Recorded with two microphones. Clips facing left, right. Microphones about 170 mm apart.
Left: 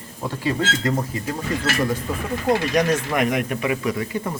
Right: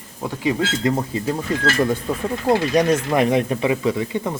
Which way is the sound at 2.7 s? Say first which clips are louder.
Right 3 dB; 30° right (ahead or behind).